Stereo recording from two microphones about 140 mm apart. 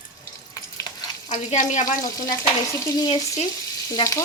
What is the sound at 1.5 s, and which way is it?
Speech, 60° left (ahead or behind).